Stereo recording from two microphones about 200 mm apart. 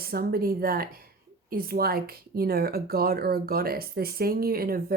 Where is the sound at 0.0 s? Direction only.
50° right (ahead or behind).